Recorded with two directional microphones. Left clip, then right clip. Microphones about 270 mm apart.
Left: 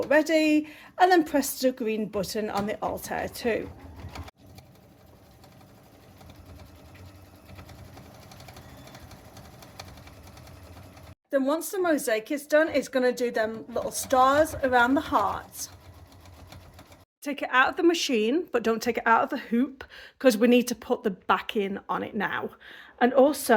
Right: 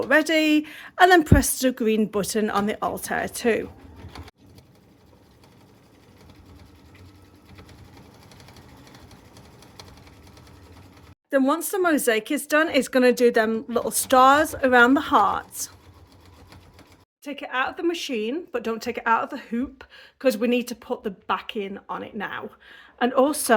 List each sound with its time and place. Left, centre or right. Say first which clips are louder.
0.1 s a woman's voice: right 3 dB; right
11.3 s speech: right 4 dB; right
17.2 s speech: left 4 dB; centre
23.0 s a woman's voice: even; centre